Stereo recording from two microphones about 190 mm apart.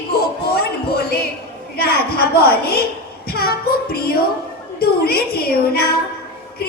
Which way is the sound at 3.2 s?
55° left (ahead or behind).